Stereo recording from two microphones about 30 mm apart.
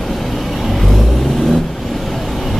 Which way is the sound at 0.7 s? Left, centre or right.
Centre.